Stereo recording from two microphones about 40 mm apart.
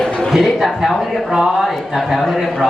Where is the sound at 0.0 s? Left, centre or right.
Centre.